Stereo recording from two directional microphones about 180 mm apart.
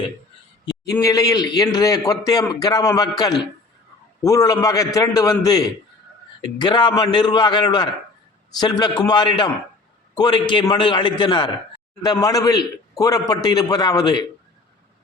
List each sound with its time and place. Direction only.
0.9 s speech: 20° left (ahead or behind)